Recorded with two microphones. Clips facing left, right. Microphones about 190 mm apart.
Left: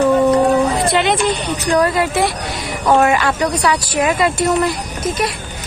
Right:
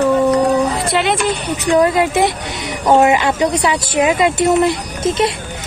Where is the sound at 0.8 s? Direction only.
Centre (ahead or behind).